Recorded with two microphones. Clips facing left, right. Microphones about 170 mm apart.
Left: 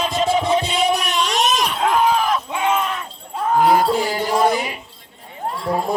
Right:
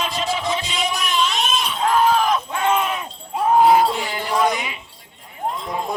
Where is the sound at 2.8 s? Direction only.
10° right (ahead or behind).